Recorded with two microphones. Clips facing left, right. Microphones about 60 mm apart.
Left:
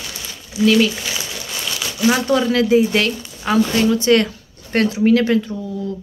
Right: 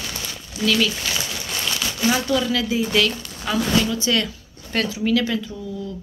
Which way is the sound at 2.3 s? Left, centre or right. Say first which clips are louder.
Left 7 dB; left.